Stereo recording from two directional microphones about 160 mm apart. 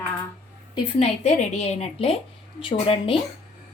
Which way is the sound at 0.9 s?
40° left (ahead or behind).